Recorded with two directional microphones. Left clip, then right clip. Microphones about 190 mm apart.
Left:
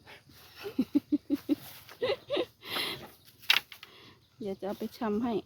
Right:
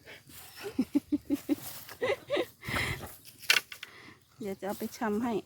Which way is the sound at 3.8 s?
Centre (ahead or behind).